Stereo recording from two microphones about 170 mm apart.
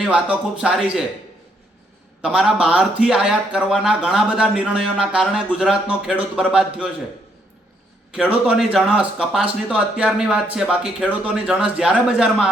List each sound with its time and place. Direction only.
0.0 s speech: 5° right (ahead or behind)
2.2 s speech: 5° right (ahead or behind)
8.1 s speech: 5° right (ahead or behind)